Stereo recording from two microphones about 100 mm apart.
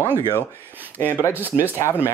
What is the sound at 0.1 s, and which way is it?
Speech, 20° right (ahead or behind).